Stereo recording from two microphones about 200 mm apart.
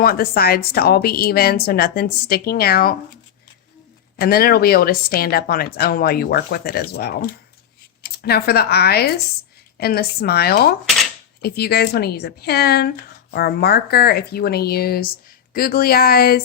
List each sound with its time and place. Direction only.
0.0 s speech: 50° left (ahead or behind)
4.2 s speech: 50° left (ahead or behind)